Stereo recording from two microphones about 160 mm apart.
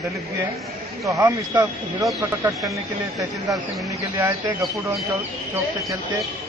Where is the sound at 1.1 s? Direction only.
20° right (ahead or behind).